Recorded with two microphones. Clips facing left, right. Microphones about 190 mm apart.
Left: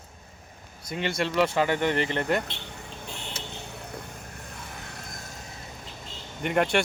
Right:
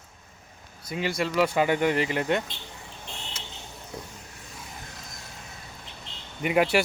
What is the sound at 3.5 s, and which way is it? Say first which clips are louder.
Vehicle: left 2 dB; 65° left (ahead or behind).